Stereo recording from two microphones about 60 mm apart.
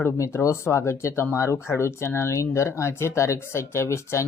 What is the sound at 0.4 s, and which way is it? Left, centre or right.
A woman's voice, left.